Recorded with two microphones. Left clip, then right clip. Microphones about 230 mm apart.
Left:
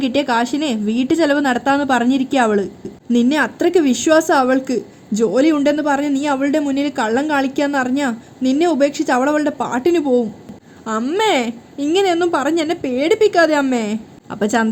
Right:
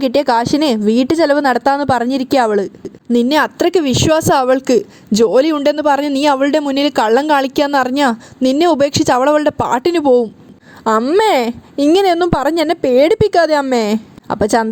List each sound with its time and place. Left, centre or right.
0.0 s speech: right
11.0 s speech: right